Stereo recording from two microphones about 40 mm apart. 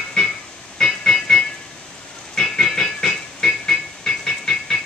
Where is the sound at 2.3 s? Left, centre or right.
Centre.